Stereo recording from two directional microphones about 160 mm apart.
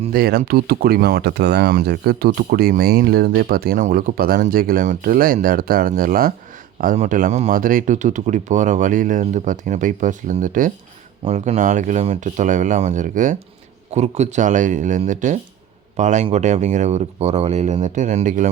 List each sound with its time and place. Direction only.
0.1 s speech: 65° right (ahead or behind)
6.7 s speech: 55° right (ahead or behind)
11.3 s speech: 45° right (ahead or behind)